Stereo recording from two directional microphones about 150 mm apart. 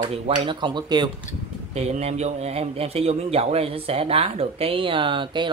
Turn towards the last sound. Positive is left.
turn(degrees=-35)  # may be behind; listen again after turning